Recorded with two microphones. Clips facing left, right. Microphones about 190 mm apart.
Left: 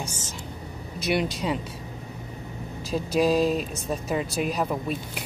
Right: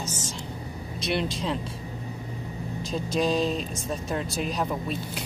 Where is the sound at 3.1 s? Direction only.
5° left (ahead or behind).